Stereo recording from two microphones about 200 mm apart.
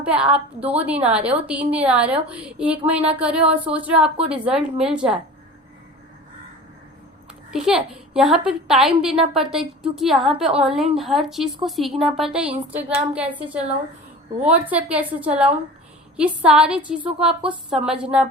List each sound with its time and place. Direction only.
0.0 s a woman's voice: 5° right (ahead or behind)
7.5 s a woman's voice: 5° right (ahead or behind)